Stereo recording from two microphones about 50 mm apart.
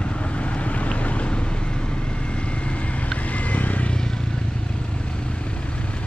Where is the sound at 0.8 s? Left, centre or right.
Left.